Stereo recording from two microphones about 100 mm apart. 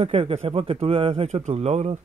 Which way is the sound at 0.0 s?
70° right (ahead or behind).